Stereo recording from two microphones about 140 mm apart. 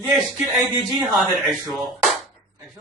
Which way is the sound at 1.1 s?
Centre (ahead or behind).